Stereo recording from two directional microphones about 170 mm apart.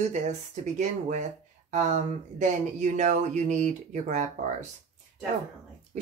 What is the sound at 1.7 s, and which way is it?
Speech, 45° right (ahead or behind).